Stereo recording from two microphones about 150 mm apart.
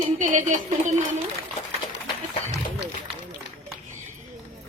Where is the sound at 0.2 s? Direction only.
60° right (ahead or behind).